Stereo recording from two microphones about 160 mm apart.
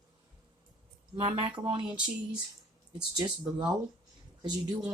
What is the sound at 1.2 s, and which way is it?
Speech, 40° right (ahead or behind).